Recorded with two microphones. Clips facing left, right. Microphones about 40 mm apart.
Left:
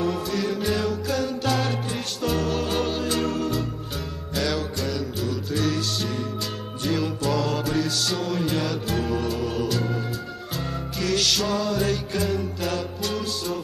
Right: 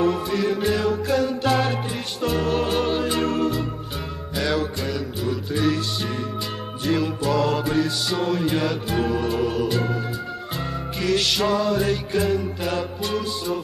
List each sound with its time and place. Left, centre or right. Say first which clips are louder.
0.3 s music: right 3 dB; centre
6.8 s music: right 2 dB; centre
11.0 s music: right 2 dB; centre